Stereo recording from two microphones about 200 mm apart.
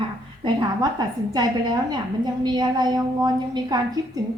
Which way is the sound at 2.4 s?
20° right (ahead or behind).